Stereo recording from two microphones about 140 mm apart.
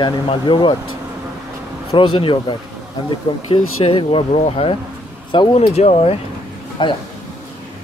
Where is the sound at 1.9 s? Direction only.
40° left (ahead or behind).